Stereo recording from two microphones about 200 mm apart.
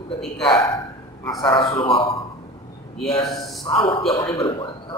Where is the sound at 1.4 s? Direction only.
20° left (ahead or behind).